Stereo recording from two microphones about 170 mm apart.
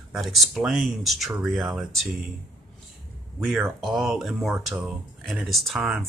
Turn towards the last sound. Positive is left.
turn(degrees=0)  # may be behind; listen again after turning